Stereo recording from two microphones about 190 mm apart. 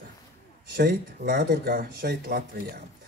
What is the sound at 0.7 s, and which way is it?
Speech, 55° right (ahead or behind).